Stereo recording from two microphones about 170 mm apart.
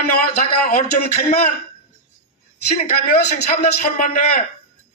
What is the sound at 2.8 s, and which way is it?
A man's voice, 40° left (ahead or behind).